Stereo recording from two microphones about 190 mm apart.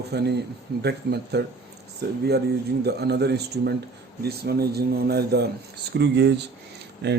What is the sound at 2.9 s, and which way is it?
Speech, 60° right (ahead or behind).